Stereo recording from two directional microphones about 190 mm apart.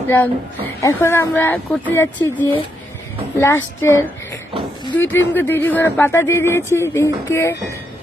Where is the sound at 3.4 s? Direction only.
10° left (ahead or behind).